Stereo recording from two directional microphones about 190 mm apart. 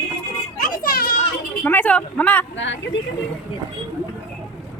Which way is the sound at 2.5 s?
75° left (ahead or behind).